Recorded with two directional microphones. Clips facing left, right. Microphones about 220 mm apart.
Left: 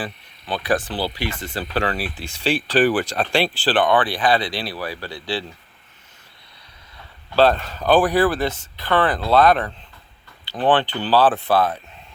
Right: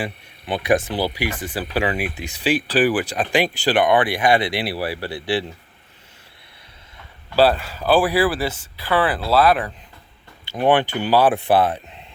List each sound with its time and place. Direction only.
0.0 s speech: 20° right (ahead or behind)
7.3 s speech: 10° right (ahead or behind)